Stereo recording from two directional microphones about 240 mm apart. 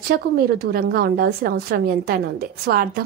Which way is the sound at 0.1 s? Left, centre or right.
Right.